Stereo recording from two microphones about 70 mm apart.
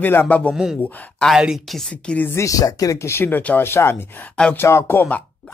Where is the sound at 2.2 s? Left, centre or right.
Left.